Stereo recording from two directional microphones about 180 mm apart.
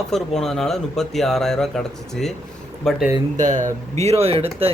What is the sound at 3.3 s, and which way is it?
Speech, 45° right (ahead or behind).